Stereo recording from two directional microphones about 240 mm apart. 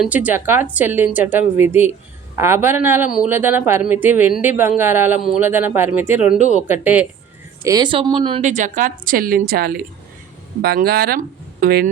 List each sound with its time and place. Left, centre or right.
0.0 s a woman's voice: centre; by 11.9 s right